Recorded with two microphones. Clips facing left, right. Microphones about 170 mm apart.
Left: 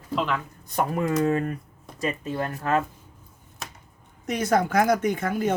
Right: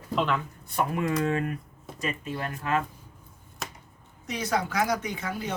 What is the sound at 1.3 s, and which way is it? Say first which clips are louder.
Speech: left 3 dB; 35° left (ahead or behind).